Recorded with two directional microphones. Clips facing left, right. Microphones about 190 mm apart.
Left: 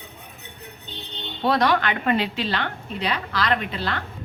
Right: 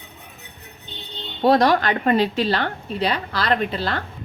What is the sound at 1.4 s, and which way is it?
A woman's voice, 40° right (ahead or behind).